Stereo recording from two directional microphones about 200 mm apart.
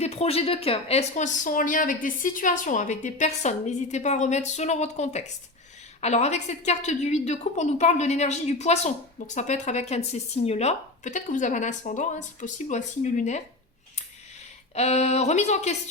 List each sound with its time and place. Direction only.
0.0 s a woman's voice: 30° left (ahead or behind)
14.8 s a woman's voice: 35° left (ahead or behind)